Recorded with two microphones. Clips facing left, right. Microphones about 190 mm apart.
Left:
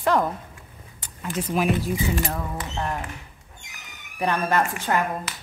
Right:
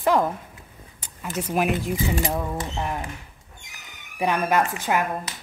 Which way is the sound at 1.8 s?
20° right (ahead or behind).